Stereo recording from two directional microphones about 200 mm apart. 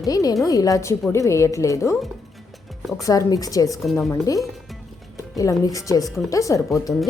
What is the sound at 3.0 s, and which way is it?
Speech, 15° left (ahead or behind).